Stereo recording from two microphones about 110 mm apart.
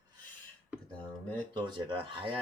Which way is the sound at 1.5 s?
45° right (ahead or behind).